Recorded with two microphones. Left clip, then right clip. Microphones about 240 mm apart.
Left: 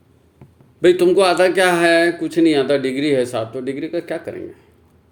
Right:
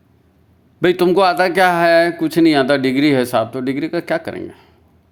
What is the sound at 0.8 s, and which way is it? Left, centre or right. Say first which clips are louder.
Speech: even; right.